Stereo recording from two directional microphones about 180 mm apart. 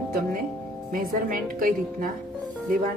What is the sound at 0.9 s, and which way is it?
A woman's voice, 50° right (ahead or behind).